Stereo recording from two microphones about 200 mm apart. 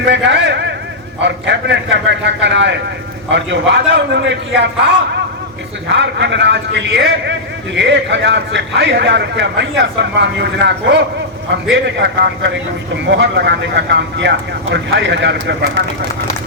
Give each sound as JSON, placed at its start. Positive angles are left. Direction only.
{"t": 0.0, "sound": "a sound", "side_deg": -65}
{"t": 1.2, "sound": "a man's voice", "side_deg": -60}
{"t": 5.9, "sound": "a man's voice", "side_deg": -60}